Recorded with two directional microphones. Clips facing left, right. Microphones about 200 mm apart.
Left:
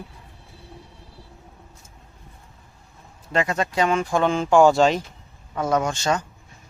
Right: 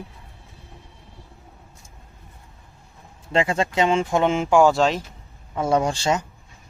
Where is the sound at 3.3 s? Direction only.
25° right (ahead or behind).